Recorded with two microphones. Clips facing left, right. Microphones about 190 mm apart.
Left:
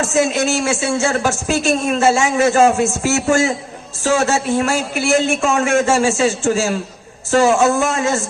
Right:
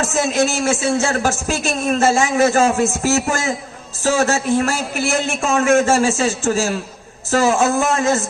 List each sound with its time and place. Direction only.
0.1 s a man's voice: 40° right (ahead or behind)